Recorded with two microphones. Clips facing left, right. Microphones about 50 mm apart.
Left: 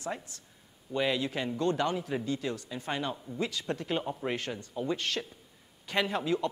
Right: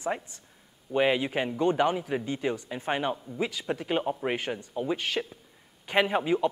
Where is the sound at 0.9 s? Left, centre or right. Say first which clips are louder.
Right 5 dB; right.